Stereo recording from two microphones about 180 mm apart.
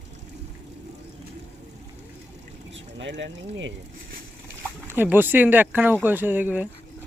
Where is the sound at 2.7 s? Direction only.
90° right.